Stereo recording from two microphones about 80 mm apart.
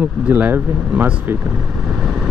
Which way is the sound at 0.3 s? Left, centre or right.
Right.